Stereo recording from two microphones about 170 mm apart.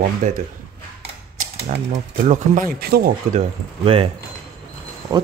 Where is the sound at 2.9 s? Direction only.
65° right (ahead or behind).